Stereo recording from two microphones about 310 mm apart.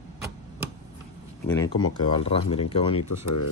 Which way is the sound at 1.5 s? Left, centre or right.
Centre.